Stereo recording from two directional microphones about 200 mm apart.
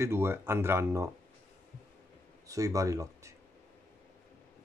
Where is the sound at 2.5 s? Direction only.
15° right (ahead or behind).